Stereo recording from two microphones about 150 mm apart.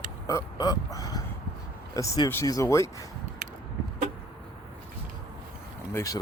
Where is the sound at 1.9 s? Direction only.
25° left (ahead or behind).